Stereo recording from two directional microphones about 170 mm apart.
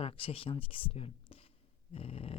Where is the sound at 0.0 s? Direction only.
35° left (ahead or behind).